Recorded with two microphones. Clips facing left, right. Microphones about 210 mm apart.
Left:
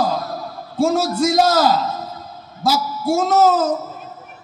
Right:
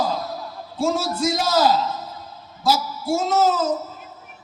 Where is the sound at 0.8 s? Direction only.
50° left (ahead or behind).